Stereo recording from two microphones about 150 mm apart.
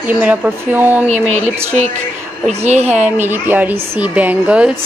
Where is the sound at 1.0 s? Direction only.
50° right (ahead or behind).